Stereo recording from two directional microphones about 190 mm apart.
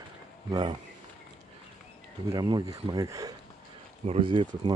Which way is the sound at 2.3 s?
20° right (ahead or behind).